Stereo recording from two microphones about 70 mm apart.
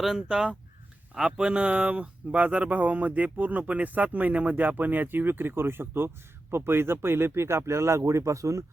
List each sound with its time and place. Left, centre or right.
0.2 s speech: centre; by 8.6 s right